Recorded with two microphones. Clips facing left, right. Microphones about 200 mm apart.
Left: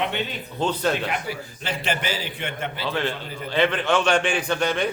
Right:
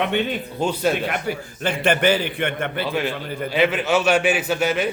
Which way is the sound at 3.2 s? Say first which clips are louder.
Right 6 dB; 60° right (ahead or behind).